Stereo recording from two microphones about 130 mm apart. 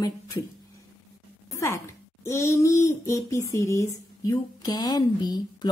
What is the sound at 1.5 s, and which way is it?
Speech, 25° left (ahead or behind).